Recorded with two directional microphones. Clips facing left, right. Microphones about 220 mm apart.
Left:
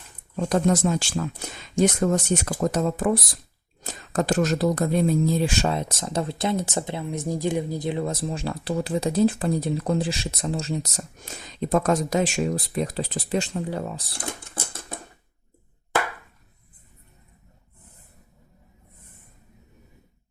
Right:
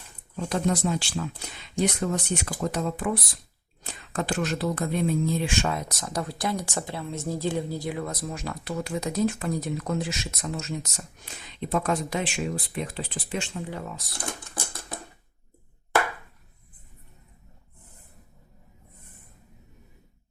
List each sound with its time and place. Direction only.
0.3 s speech: 45° left (ahead or behind); by 14.9 s 25° left (ahead or behind)